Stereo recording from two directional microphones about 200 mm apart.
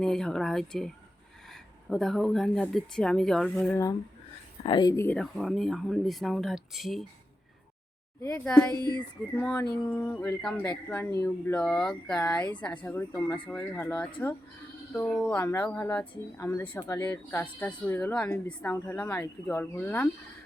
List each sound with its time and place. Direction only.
0.0 s speech: 5° left (ahead or behind)
4.6 s a sound: 25° left (ahead or behind)
5.0 s speech: 5° left (ahead or behind)
8.4 s speech: 5° left (ahead or behind)
8.9 s a sound: 20° left (ahead or behind)
9.4 s speech: 5° left (ahead or behind)